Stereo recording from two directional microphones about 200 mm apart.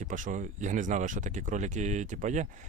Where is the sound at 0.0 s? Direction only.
40° right (ahead or behind).